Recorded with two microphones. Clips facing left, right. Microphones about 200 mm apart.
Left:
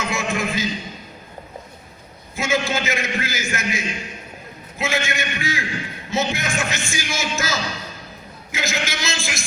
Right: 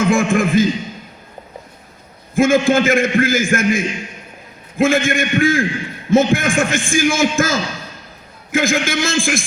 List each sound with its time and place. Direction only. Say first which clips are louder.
0.0 s a man's voice: right 9 dB; 50° right (ahead or behind)
2.3 s a man's voice: right 10 dB; 50° right (ahead or behind)